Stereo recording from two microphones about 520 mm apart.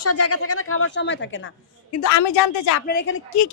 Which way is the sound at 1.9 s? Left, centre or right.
Left.